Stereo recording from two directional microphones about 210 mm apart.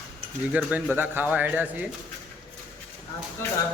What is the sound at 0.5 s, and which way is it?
Speech, 5° right (ahead or behind).